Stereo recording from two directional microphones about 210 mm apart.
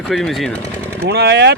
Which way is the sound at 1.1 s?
55° right (ahead or behind).